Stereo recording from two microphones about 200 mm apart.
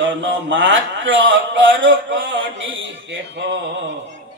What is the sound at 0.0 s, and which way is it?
Mantra, 70° right (ahead or behind).